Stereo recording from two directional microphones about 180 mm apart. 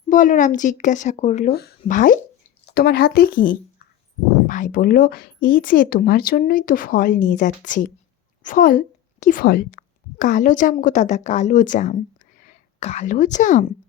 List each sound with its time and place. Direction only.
0.1 s a woman's voice: 45° left (ahead or behind)
1.5 s speech: 60° left (ahead or behind)
1.8 s a woman's voice: 50° left (ahead or behind)
2.6 s a woman's voice: 60° left (ahead or behind); by 13.7 s 45° left (ahead or behind)